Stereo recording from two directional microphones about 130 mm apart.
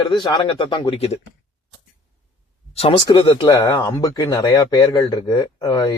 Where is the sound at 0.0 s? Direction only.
35° left (ahead or behind).